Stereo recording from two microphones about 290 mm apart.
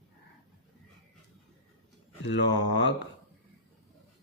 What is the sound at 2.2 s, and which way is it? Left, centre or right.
Speech, left.